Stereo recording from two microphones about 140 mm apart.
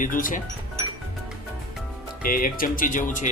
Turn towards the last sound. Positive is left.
turn(degrees=65)  # may be behind; listen again after turning